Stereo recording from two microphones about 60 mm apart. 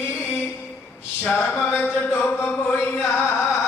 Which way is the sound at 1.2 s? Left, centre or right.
Left.